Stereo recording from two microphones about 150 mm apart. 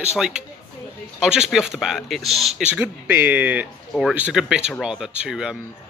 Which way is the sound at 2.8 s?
15° right (ahead or behind).